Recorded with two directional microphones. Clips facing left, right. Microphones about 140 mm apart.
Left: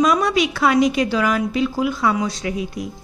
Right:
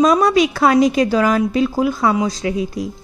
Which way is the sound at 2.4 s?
30° right (ahead or behind).